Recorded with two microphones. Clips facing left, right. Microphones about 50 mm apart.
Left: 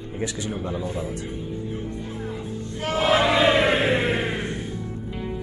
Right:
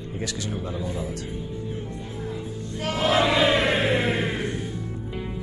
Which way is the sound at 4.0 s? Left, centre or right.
Left.